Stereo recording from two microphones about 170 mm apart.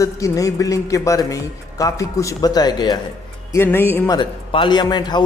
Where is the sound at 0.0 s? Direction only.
20° left (ahead or behind).